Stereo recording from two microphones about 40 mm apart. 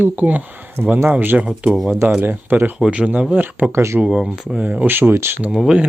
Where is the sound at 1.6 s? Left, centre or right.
Right.